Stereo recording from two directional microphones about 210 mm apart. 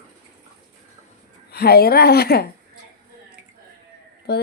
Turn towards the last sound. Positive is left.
turn(degrees=50)  # may be behind; listen again after turning